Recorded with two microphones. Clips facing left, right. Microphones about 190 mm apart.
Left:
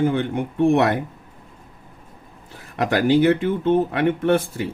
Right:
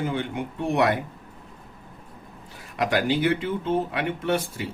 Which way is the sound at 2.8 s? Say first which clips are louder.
Left 6 dB; 50° left (ahead or behind).